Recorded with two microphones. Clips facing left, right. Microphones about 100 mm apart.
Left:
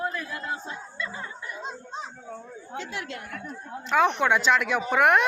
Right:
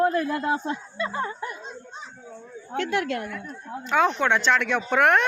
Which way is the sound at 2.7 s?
60° right (ahead or behind).